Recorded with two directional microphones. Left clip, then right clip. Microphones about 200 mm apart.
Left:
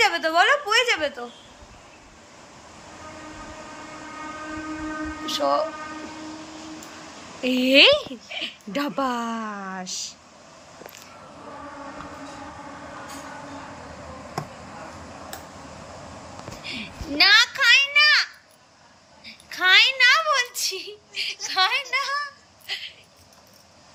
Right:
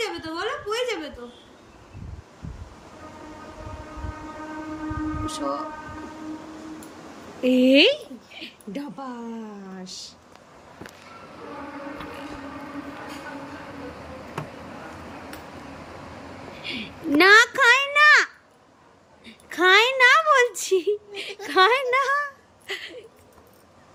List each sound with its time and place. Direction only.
0.0 s a woman's voice: centre (ahead or behind)
5.2 s speech: 5° right (ahead or behind)
7.4 s speech: 10° right (ahead or behind)
8.8 s speech: 40° left (ahead or behind)
9.7 s a woman's voice: centre (ahead or behind)
16.6 s a child's voice: centre (ahead or behind)
17.2 s a child's voice: 20° right (ahead or behind)